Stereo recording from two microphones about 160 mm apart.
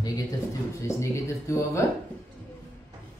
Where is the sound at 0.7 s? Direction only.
20° left (ahead or behind).